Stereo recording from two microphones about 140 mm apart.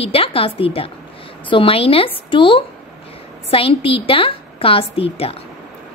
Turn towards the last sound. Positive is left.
turn(degrees=45)  # may be behind; listen again after turning